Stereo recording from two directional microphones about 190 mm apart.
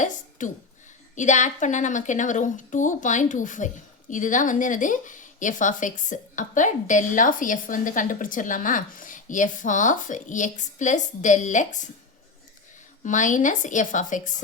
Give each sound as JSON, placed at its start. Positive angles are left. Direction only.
{"t": 0.0, "sound": "a sound", "side_deg": 40}
{"t": 1.1, "sound": "a woman's voice", "side_deg": 40}
{"t": 13.1, "sound": "a woman's voice", "side_deg": 40}